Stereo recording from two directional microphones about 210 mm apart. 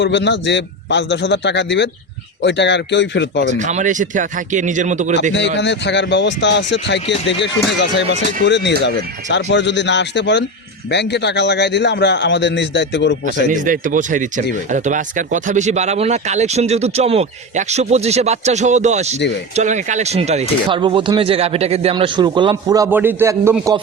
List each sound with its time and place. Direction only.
0.0 s a man's voice: 55° left (ahead or behind)
3.4 s speech: 35° right (ahead or behind)
5.3 s a man's voice: 55° left (ahead or behind)
13.5 s speech: 40° right (ahead or behind); by 23.7 s 15° right (ahead or behind)